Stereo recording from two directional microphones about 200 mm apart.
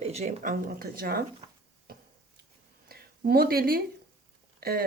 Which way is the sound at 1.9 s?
50° right (ahead or behind).